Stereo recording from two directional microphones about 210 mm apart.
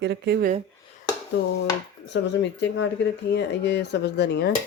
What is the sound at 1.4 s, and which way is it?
Speech, 55° left (ahead or behind).